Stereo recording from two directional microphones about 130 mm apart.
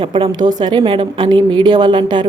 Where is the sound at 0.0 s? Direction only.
40° right (ahead or behind).